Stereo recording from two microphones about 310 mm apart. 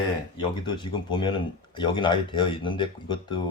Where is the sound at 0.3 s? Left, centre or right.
Centre.